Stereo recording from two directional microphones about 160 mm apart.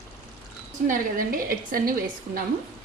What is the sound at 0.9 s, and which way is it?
A woman's voice, 55° right (ahead or behind).